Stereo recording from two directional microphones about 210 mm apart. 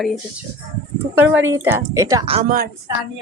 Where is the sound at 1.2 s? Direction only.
10° right (ahead or behind).